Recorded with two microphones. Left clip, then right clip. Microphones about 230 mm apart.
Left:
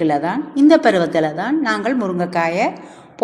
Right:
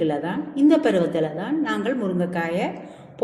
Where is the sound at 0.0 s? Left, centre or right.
Left.